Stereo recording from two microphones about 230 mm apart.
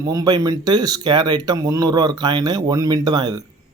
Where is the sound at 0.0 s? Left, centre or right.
Centre.